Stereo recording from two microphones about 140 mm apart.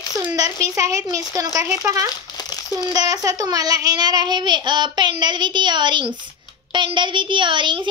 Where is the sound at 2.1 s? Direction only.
30° left (ahead or behind).